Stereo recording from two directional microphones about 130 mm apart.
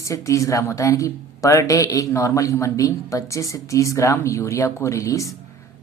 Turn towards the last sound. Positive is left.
turn(degrees=25)  # may be behind; listen again after turning